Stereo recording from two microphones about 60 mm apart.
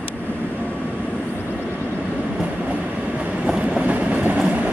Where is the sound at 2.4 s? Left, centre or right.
Right.